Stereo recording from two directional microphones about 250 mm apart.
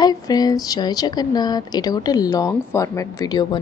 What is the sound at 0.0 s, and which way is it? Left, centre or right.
Speech, centre.